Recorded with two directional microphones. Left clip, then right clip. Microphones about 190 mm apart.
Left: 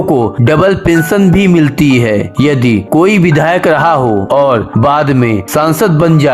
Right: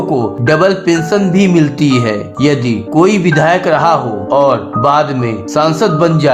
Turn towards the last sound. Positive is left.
turn(degrees=35)  # may be behind; listen again after turning